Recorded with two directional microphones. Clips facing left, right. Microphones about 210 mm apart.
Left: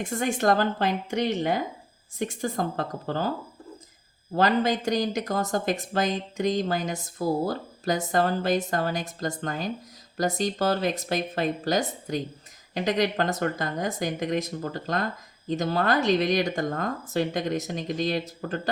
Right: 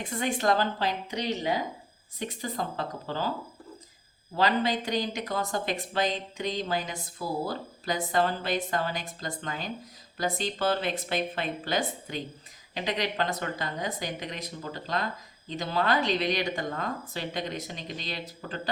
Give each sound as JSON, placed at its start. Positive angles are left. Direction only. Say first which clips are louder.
{"t": 0.0, "sound": "speech", "louder": "left 3 dB", "side_deg": 45}
{"t": 4.4, "sound": "speech", "louder": "left 3 dB", "side_deg": 45}